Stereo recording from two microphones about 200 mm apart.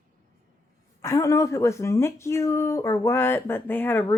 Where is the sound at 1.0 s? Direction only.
15° left (ahead or behind).